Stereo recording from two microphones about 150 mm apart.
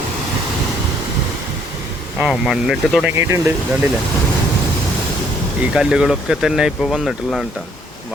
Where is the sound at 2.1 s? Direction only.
5° right (ahead or behind).